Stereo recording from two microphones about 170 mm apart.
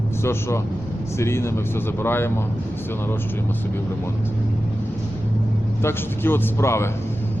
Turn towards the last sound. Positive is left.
turn(degrees=15)  # may be behind; listen again after turning